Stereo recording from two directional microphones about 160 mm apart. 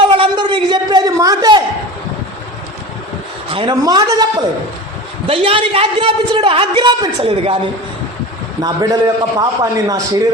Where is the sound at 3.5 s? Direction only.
30° right (ahead or behind).